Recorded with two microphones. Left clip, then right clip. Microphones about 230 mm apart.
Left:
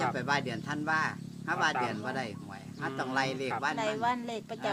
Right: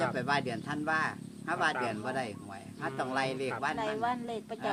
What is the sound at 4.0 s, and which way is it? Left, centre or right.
Speech, centre.